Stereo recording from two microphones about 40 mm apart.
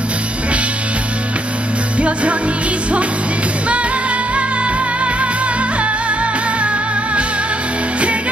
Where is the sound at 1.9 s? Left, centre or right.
Right.